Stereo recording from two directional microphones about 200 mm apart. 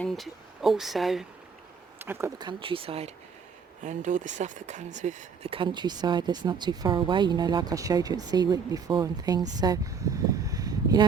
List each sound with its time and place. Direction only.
0.0 s speech: centre (ahead or behind)
2.0 s speech: 10° right (ahead or behind)
9.6 s a sound: 20° right (ahead or behind)